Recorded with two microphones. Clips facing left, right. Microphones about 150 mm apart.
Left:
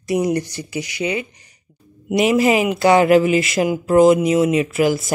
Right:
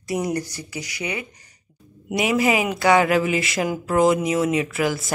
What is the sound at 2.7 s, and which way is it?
A woman's voice, 25° left (ahead or behind).